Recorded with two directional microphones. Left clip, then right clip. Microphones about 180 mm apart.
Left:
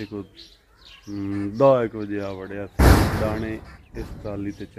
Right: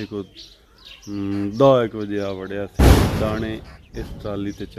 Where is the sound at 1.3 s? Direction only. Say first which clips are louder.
Right 2 dB; 20° right (ahead or behind).